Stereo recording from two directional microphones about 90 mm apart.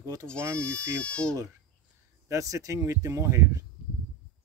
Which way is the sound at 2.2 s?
35° right (ahead or behind).